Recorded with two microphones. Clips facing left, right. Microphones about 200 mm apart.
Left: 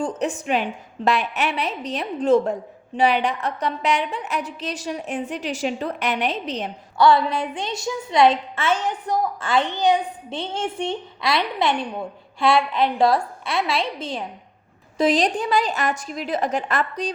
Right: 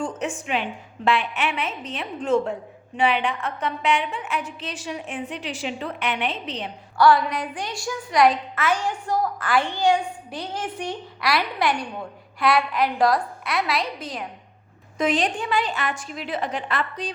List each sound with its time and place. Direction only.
0.0 s a woman's voice: 35° left (ahead or behind)
6.9 s a woman's voice: 25° left (ahead or behind); by 17.1 s 45° left (ahead or behind)